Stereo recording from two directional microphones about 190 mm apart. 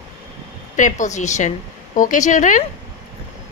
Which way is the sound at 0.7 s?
40° left (ahead or behind).